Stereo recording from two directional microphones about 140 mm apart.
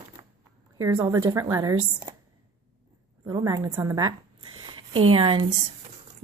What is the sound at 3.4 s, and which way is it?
Speech, 20° right (ahead or behind).